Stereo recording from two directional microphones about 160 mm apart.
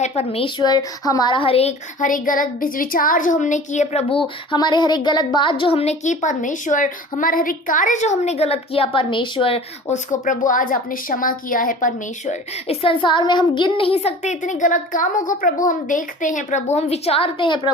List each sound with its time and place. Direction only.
0.0 s a woman's voice: 40° left (ahead or behind)
2.0 s speech: 55° left (ahead or behind)
4.5 s a woman's voice: 25° left (ahead or behind)
9.9 s a woman's voice: 55° left (ahead or behind); by 17.6 s 30° left (ahead or behind)